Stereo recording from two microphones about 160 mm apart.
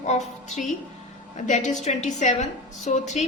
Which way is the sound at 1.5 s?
45° left (ahead or behind).